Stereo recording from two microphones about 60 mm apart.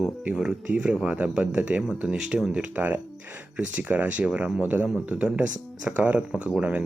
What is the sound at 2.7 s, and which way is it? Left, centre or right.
Speech, right.